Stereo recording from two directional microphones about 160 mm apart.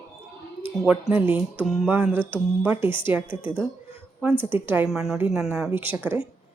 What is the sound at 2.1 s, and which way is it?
Speech, 30° left (ahead or behind).